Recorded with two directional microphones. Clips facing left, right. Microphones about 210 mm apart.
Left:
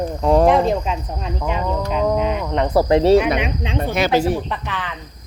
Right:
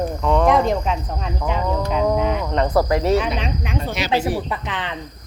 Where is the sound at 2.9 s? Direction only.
30° left (ahead or behind).